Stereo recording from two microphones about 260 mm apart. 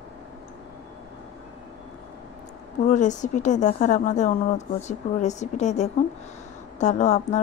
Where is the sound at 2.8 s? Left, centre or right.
Left.